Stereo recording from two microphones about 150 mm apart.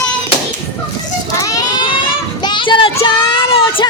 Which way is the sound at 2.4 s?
30° left (ahead or behind).